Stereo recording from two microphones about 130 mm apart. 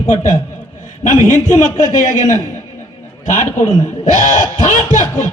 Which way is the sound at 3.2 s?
65° left (ahead or behind).